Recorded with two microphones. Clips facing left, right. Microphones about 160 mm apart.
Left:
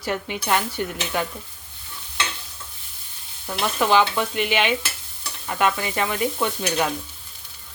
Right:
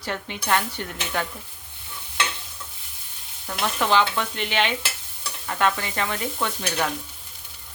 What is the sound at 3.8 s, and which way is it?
Stir, 10° left (ahead or behind).